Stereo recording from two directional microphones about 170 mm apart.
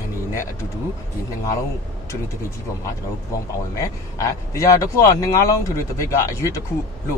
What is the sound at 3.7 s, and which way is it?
Speech, 20° left (ahead or behind).